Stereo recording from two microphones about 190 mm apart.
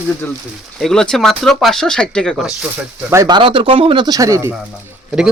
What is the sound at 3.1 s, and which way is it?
Speech, 20° right (ahead or behind).